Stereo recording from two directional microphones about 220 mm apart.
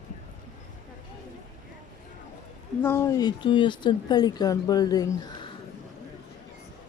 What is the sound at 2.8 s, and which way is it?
Speech, 10° left (ahead or behind).